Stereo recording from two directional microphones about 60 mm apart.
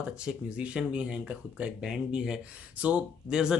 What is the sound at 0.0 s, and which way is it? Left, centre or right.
Speech, centre.